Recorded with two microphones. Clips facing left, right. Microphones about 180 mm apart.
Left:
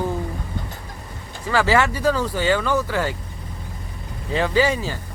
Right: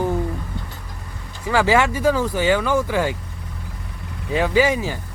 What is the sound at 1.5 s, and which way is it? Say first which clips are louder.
Speech: right 1 dB; 15° right (ahead or behind).